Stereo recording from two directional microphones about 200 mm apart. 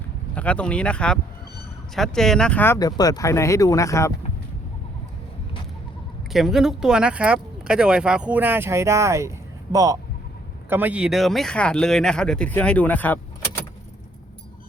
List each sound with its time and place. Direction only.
0.3 s speech: 5° left (ahead or behind)
6.3 s speech: centre (ahead or behind)